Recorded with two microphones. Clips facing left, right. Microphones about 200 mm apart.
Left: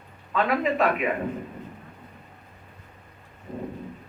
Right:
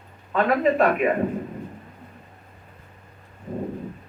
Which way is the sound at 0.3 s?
45° right (ahead or behind).